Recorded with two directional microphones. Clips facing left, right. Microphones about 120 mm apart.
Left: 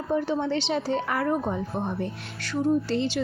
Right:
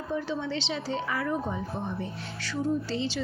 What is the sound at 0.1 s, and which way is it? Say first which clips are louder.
Speech: left 6 dB; 55° left (ahead or behind).